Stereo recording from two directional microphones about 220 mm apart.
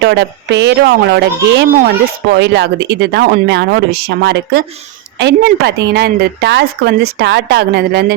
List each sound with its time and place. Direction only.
0.0 s a woman's voice: 50° right (ahead or behind)